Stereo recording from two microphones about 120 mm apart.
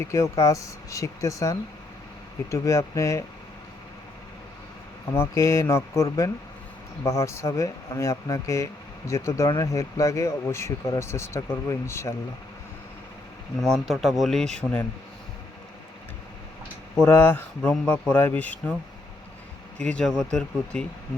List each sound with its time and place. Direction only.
0.0 s speech: 25° left (ahead or behind)
5.1 s speech: 25° left (ahead or behind)
13.7 s speech: centre (ahead or behind)
14.6 s a man's voice: 15° left (ahead or behind)
17.0 s a man's voice: 20° left (ahead or behind)
19.8 s a man's voice: 10° left (ahead or behind)